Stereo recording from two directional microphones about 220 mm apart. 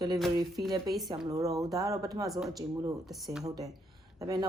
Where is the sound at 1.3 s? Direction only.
15° right (ahead or behind).